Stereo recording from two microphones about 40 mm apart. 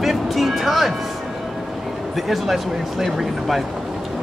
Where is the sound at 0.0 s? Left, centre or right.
Centre.